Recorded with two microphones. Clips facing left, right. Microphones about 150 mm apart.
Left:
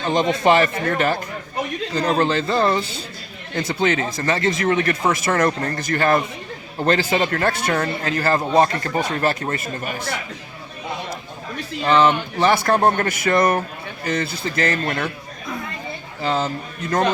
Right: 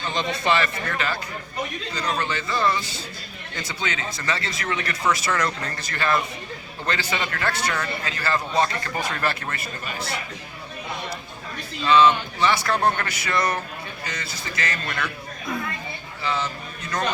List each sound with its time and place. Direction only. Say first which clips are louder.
0.0 s speech: left 8 dB; 45° left (ahead or behind)
8.6 s speech: left 5 dB; 40° left (ahead or behind)
11.8 s speech: left 1 dB; 55° left (ahead or behind)
16.2 s speech: left 5 dB; 50° left (ahead or behind)